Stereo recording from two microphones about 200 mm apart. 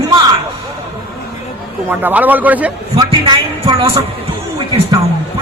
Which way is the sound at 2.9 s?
25° right (ahead or behind).